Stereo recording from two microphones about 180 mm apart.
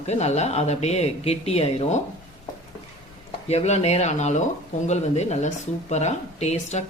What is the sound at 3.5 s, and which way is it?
Speech, 35° left (ahead or behind).